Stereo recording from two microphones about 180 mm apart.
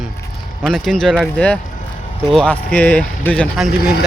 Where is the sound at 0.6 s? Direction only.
Centre (ahead or behind).